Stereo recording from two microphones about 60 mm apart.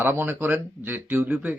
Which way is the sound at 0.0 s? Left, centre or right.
Right.